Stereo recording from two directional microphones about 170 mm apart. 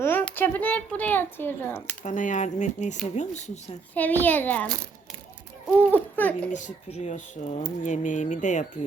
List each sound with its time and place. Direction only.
0.0 s a sound: 10° left (ahead or behind)
0.3 s speech: 10° left (ahead or behind)
2.0 s speech: 50° left (ahead or behind)
4.2 s speech: 10° left (ahead or behind)
5.9 s speech: 10° left (ahead or behind)
6.5 s speech: 45° left (ahead or behind)